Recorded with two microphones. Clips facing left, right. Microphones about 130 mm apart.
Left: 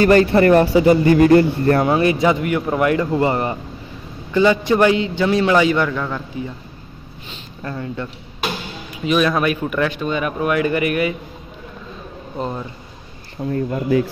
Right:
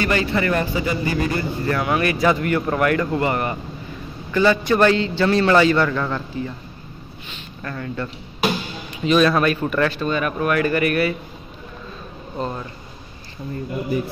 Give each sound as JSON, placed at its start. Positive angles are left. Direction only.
{"t": 0.0, "sound": "a man's voice", "side_deg": 40}
{"t": 1.8, "sound": "speech", "side_deg": 30}
{"t": 7.6, "sound": "speech", "side_deg": 20}
{"t": 12.4, "sound": "speech", "side_deg": 15}
{"t": 13.5, "sound": "speech", "side_deg": 75}